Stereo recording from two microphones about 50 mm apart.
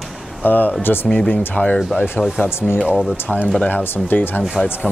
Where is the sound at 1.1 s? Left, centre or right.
Left.